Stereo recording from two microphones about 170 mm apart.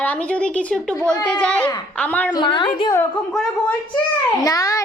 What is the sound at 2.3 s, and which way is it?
Speech, 25° left (ahead or behind).